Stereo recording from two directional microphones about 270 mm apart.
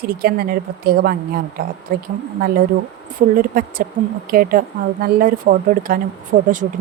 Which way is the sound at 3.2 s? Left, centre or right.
Right.